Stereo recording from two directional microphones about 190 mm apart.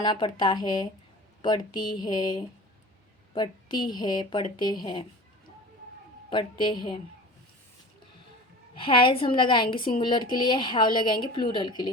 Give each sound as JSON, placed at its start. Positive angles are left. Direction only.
{"t": 0.0, "sound": "a woman's voice", "side_deg": 25}
{"t": 6.3, "sound": "a woman's voice", "side_deg": 25}
{"t": 8.7, "sound": "a woman's voice", "side_deg": 25}